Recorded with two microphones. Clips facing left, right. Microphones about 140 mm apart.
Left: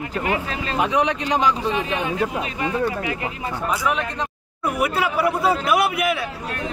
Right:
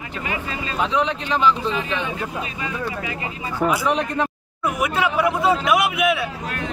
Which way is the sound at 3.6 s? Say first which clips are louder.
Right 6 dB; 75° right (ahead or behind).